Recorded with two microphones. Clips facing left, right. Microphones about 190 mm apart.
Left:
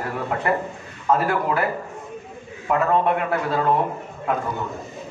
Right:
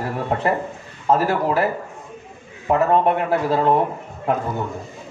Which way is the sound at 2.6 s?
30° right (ahead or behind).